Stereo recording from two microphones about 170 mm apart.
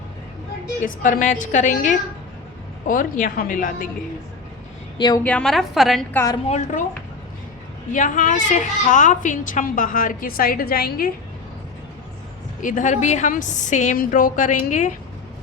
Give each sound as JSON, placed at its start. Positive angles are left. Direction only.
{"t": 0.9, "sound": "a woman's voice", "side_deg": 50}
{"t": 4.9, "sound": "a woman's voice", "side_deg": 25}
{"t": 5.2, "sound": "a woman's voice", "side_deg": 5}
{"t": 6.1, "sound": "a woman's voice", "side_deg": 20}
{"t": 6.5, "sound": "a woman's voice", "side_deg": 45}
{"t": 7.9, "sound": "a woman's voice", "side_deg": 45}
{"t": 12.6, "sound": "a woman's voice", "side_deg": 50}